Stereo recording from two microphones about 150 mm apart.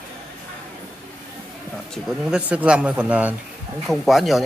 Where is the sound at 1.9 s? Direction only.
5° right (ahead or behind).